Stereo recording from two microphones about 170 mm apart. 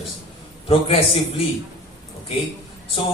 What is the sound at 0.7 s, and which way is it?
Speech, 35° left (ahead or behind).